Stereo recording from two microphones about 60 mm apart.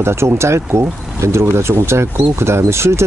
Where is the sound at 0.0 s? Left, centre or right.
Right.